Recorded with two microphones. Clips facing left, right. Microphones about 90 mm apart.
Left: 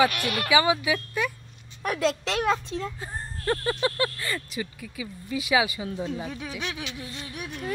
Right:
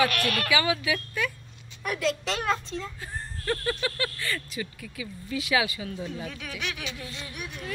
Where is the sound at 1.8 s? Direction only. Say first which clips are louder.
Left 3 dB; 35° left (ahead or behind).